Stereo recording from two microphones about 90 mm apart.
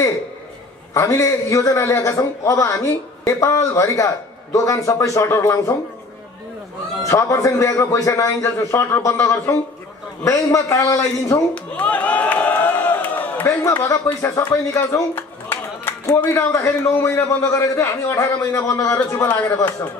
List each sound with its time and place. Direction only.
0.9 s a man's voice: 35° left (ahead or behind)
7.1 s a man's voice: 35° left (ahead or behind)
10.2 s a man's voice: 35° left (ahead or behind)
11.5 s a sound: 15° left (ahead or behind)
13.5 s speech: 30° left (ahead or behind)
14.3 s a man's voice: 35° left (ahead or behind)
16.5 s a man's voice: 35° left (ahead or behind)
19.2 s speech: 20° left (ahead or behind)